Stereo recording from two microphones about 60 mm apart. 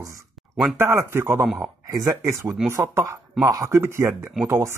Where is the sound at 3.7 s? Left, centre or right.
Right.